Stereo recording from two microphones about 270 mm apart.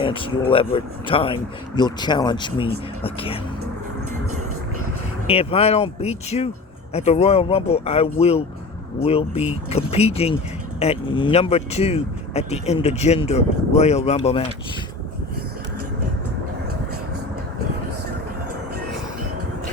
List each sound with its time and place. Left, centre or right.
0.0 s speech: centre
5.2 s speech: left